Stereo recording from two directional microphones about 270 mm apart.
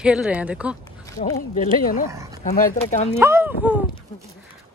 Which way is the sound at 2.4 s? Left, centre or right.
Left.